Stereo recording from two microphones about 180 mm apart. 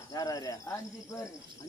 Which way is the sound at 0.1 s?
20° left (ahead or behind).